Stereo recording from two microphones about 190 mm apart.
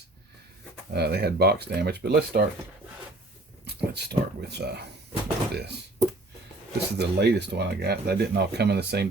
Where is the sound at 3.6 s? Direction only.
60° right (ahead or behind).